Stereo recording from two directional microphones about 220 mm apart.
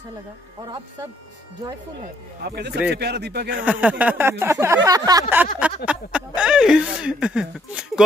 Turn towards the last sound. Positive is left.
turn(degrees=-5)  # may be behind; listen again after turning